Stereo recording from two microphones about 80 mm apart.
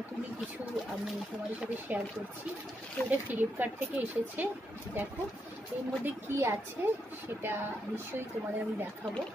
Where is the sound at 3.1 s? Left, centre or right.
Right.